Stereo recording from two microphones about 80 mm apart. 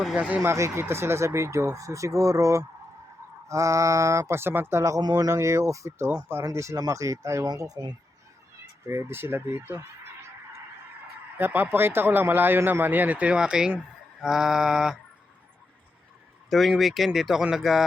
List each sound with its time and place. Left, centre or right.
0.2 s speech: centre
0.4 s speech: right
7.4 s speech: right
8.9 s speech: right
11.3 s speech: right; by 14.9 s centre
16.5 s speech: centre